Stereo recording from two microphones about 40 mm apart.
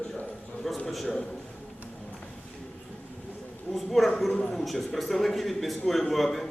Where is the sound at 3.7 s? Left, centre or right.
Centre.